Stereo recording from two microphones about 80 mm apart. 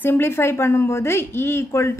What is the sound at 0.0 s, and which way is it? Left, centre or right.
A woman's voice, left.